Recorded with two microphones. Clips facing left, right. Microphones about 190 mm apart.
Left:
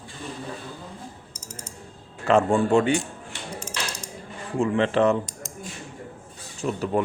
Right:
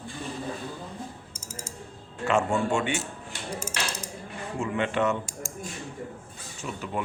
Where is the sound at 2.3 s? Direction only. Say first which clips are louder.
Left 5 dB; 35° left (ahead or behind).